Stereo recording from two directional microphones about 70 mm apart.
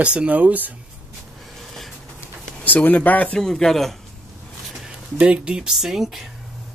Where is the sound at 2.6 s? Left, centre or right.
Left.